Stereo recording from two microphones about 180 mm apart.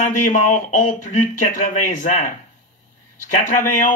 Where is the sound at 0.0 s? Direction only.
45° left (ahead or behind).